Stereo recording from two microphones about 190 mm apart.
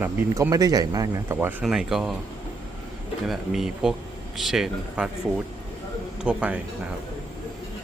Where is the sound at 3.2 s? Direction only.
Centre (ahead or behind).